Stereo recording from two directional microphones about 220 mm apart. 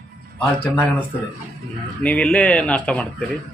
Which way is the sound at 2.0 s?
5° left (ahead or behind).